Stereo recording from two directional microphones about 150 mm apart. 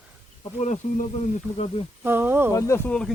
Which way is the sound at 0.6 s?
50° left (ahead or behind).